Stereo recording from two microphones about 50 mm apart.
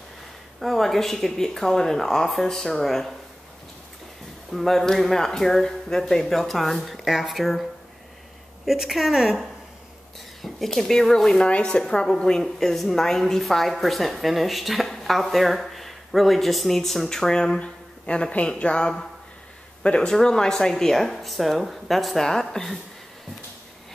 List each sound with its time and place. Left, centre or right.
0.6 s speech: centre
4.5 s a woman's voice: centre
8.6 s a woman's voice: centre
10.4 s a woman's voice: centre